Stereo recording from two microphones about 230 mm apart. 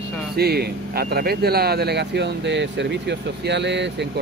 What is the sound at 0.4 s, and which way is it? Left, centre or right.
Speech, right.